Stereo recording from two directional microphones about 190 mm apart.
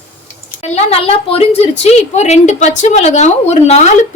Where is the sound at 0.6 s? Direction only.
35° left (ahead or behind).